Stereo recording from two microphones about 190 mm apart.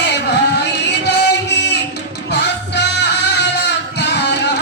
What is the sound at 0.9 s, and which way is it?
Music, 65° left (ahead or behind).